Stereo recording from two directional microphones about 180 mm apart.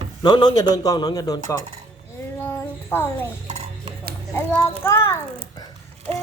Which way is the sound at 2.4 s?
10° left (ahead or behind).